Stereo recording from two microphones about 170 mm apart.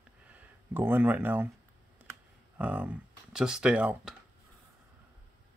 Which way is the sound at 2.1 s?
10° right (ahead or behind).